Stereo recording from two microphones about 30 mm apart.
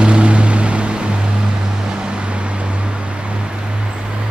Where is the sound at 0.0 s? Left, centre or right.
Right.